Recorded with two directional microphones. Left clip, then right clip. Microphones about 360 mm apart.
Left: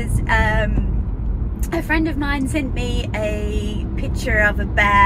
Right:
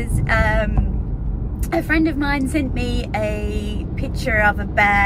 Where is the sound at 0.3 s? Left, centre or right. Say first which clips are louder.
Even; centre.